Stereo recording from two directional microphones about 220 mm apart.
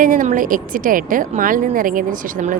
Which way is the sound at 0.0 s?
35° right (ahead or behind).